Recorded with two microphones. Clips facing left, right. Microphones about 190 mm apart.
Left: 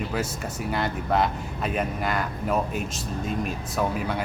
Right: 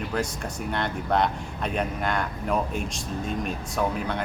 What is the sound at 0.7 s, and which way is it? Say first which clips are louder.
Speech: left 1 dB; 5° left (ahead or behind).